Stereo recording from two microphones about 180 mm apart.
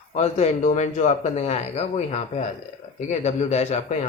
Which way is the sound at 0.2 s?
40° left (ahead or behind).